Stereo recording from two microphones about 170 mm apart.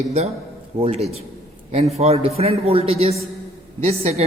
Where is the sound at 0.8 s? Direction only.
35° right (ahead or behind).